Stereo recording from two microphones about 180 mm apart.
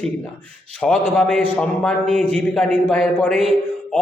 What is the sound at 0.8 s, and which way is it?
A man's voice, 5° left (ahead or behind).